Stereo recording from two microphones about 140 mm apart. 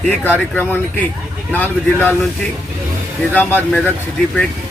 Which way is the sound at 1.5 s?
15° left (ahead or behind).